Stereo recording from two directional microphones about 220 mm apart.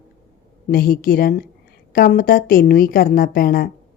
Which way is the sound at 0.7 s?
40° left (ahead or behind).